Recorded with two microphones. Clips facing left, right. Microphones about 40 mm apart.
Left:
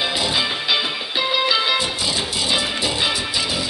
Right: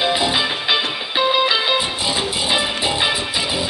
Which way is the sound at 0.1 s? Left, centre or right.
Centre.